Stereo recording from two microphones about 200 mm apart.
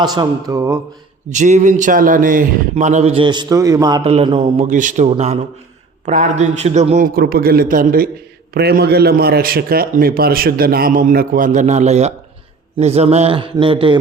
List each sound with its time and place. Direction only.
0.0 s a man's voice: 20° right (ahead or behind)
1.3 s a man's voice: 35° right (ahead or behind)